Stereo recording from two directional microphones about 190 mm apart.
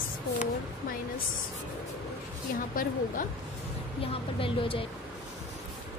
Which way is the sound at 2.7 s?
45° left (ahead or behind).